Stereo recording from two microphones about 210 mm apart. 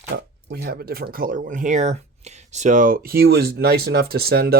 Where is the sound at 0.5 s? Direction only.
50° right (ahead or behind).